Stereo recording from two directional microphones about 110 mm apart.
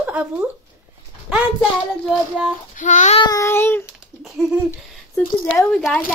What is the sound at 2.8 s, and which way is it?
Child singing, 90° left.